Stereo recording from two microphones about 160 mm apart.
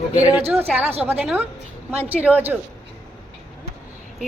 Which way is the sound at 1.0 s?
10° right (ahead or behind).